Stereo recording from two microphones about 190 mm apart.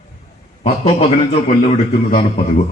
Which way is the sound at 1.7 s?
35° left (ahead or behind).